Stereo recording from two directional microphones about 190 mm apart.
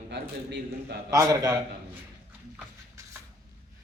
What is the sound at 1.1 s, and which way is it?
Speech, 20° right (ahead or behind).